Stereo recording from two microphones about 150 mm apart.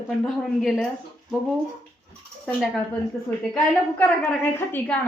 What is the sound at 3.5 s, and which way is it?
A woman's voice, 10° left (ahead or behind).